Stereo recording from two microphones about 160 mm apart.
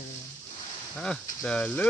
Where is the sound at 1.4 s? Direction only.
5° left (ahead or behind).